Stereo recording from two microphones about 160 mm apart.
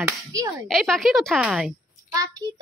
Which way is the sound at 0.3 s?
20° right (ahead or behind).